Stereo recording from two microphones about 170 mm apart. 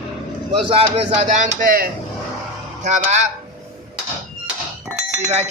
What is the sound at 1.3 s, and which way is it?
A man's voice, 50° right (ahead or behind).